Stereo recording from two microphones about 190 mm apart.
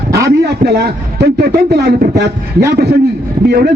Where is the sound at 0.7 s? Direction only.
60° right (ahead or behind).